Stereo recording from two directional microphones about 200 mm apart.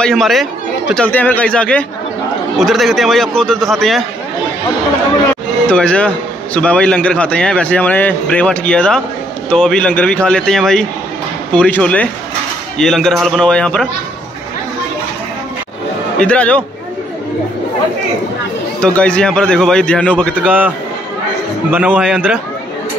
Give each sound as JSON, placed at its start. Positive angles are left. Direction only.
{"t": 0.0, "sound": "a man's voice", "side_deg": 0}
{"t": 5.7, "sound": "a man's voice", "side_deg": 5}
{"t": 16.2, "sound": "a man's voice", "side_deg": 5}
{"t": 18.8, "sound": "a man's voice", "side_deg": 5}
{"t": 21.6, "sound": "a man's voice", "side_deg": -5}